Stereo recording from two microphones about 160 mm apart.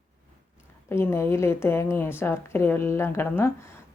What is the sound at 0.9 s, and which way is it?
A woman's voice, 15° left (ahead or behind).